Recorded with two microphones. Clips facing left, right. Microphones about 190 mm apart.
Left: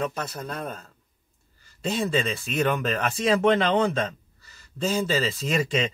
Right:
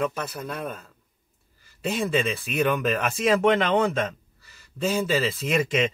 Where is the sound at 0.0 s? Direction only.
35° left (ahead or behind).